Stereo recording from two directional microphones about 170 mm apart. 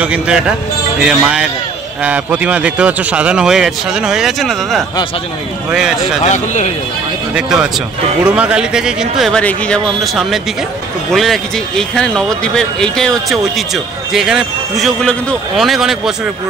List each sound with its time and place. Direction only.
0.0 s a man's voice: 5° right (ahead or behind)
6.2 s a man's voice: 45° left (ahead or behind)
7.3 s speech: 5° right (ahead or behind)